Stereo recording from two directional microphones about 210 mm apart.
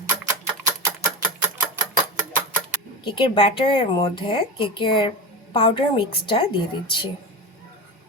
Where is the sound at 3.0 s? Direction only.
25° left (ahead or behind).